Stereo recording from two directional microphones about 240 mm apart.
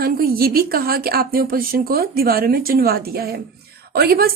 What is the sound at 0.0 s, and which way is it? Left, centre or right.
A woman's voice, right.